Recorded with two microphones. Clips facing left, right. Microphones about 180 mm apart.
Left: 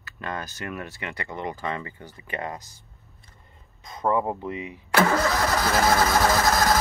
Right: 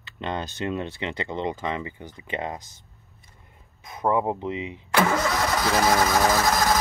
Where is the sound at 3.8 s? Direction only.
10° right (ahead or behind).